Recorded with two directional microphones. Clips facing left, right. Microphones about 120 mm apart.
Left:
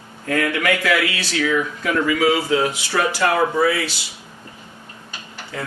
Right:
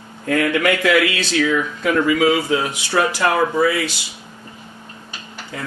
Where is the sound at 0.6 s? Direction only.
25° right (ahead or behind).